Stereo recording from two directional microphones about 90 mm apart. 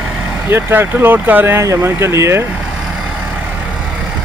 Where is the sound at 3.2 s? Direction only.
15° right (ahead or behind).